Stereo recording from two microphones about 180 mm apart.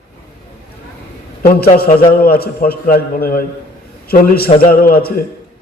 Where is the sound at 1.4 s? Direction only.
55° left (ahead or behind).